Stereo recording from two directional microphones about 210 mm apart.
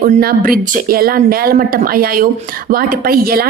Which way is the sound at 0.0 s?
45° right (ahead or behind).